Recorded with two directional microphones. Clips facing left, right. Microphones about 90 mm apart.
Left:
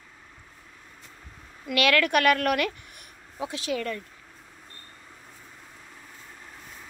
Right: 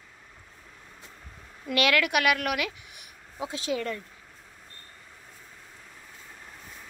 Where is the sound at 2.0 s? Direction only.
10° right (ahead or behind).